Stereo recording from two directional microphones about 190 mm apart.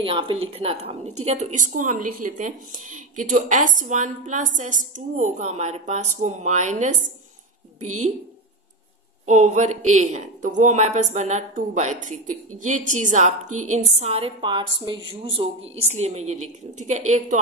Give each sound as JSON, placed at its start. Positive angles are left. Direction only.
{"t": 0.0, "sound": "a woman's voice", "side_deg": -30}
{"t": 9.2, "sound": "a woman's voice", "side_deg": -40}